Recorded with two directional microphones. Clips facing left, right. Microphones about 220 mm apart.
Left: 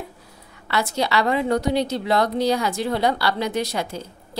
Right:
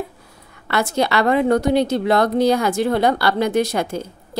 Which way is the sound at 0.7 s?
55° right (ahead or behind).